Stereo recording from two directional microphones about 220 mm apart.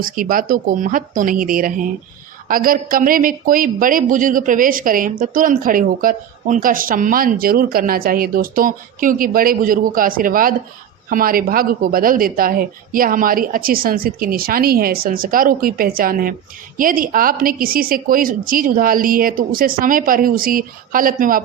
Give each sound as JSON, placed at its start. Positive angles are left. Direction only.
{"t": 0.0, "sound": "speech", "side_deg": -40}